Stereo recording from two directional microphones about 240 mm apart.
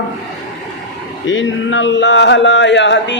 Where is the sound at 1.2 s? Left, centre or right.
Left.